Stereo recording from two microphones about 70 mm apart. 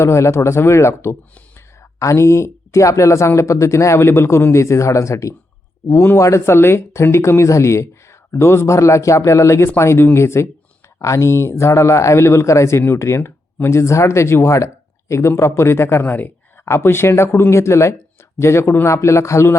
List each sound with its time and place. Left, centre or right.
0.0 s speech: left
5.9 s speech: left
6.1 s speech: left
16.0 s speech: left
16.6 s speech: left